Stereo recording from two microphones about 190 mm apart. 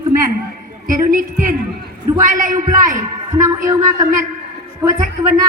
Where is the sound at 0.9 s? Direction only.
45° right (ahead or behind).